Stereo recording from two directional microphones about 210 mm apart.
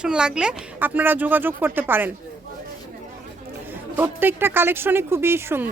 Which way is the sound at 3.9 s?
10° right (ahead or behind).